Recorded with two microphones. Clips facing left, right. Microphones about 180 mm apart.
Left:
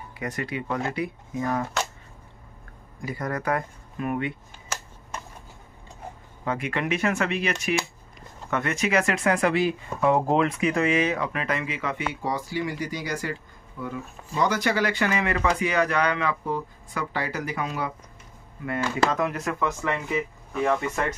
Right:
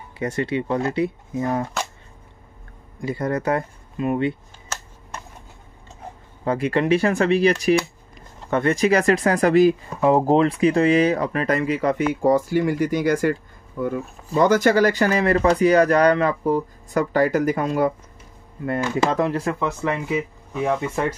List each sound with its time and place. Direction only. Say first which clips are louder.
0.2 s speech: right 7 dB; 25° right (ahead or behind)
3.0 s speech: right 6 dB; 25° right (ahead or behind)
6.4 s speech: right 7 dB; 35° right (ahead or behind)
19.1 s speech: right 5 dB; 30° right (ahead or behind)